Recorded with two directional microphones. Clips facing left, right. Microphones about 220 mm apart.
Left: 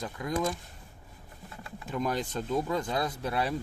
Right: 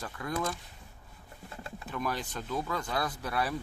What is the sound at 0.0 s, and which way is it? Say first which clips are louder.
Speech: left 3 dB; 15° left (ahead or behind).